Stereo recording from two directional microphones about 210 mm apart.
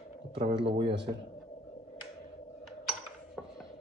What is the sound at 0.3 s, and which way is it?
Speech, 25° right (ahead or behind).